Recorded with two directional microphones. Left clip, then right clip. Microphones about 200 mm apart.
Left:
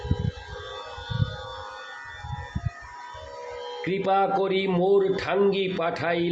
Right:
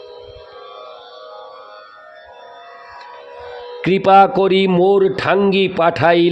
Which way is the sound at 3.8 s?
60° right (ahead or behind).